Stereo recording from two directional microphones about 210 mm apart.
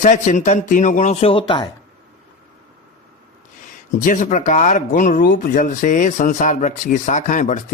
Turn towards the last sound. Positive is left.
turn(degrees=35)  # may be behind; listen again after turning